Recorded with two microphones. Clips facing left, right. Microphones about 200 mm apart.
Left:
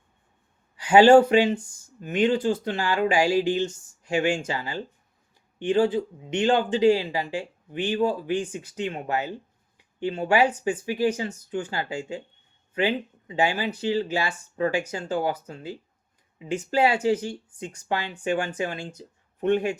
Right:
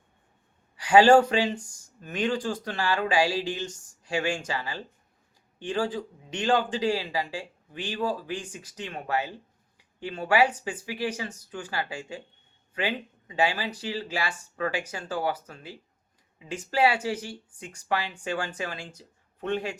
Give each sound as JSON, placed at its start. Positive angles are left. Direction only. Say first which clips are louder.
{"t": 0.9, "sound": "speech", "louder": "left 3 dB", "side_deg": 20}
{"t": 16.7, "sound": "speech", "louder": "left 3 dB", "side_deg": 25}